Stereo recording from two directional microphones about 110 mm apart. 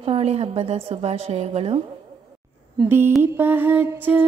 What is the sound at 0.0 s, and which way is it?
A woman's voice, 70° right (ahead or behind).